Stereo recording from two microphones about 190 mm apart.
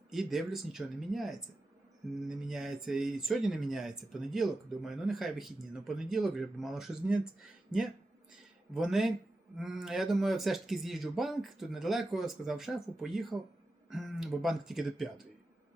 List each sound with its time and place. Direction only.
0.1 s speech: centre (ahead or behind)
8.7 s speech: centre (ahead or behind)